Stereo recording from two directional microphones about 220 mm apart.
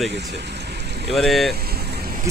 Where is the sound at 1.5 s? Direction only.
45° right (ahead or behind).